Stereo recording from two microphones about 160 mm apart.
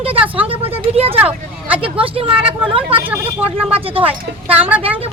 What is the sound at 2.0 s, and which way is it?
A woman's voice, 35° right (ahead or behind).